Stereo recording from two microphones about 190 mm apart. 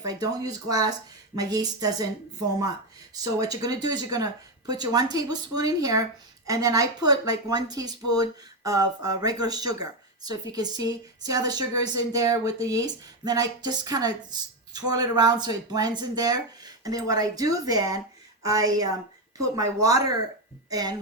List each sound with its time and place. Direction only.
0.0 s a woman's voice: 20° right (ahead or behind)
3.3 s a woman's voice: 20° right (ahead or behind)